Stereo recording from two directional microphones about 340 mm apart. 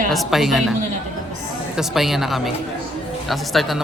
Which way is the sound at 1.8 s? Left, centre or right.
Centre.